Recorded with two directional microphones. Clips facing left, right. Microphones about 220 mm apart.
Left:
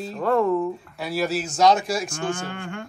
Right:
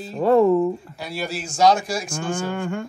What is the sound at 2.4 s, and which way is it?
Music, 45° right (ahead or behind).